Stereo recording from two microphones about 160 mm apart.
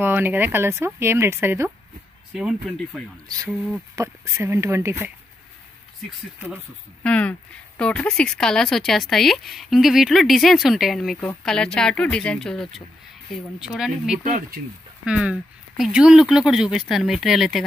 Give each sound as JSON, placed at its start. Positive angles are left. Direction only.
{"t": 0.0, "sound": "speech", "side_deg": -15}
{"t": 2.3, "sound": "speech", "side_deg": -5}
{"t": 3.9, "sound": "speech", "side_deg": -20}
{"t": 7.0, "sound": "speech", "side_deg": 10}
{"t": 14.2, "sound": "speech", "side_deg": -55}
{"t": 15.0, "sound": "speech", "side_deg": -5}